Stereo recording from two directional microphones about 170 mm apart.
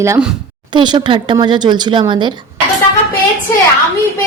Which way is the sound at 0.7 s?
25° right (ahead or behind).